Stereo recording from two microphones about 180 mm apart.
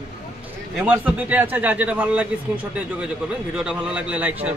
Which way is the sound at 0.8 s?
10° right (ahead or behind).